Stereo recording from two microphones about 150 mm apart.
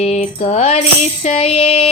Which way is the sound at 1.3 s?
40° left (ahead or behind).